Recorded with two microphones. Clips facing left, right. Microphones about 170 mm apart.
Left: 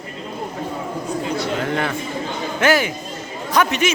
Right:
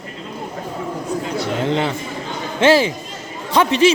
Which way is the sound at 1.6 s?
20° right (ahead or behind).